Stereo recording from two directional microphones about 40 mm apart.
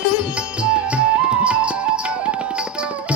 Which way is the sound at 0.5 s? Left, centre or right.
Right.